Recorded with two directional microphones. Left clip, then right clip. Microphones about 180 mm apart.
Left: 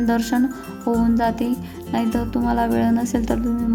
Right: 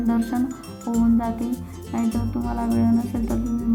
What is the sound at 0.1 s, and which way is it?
Speech, 30° left (ahead or behind).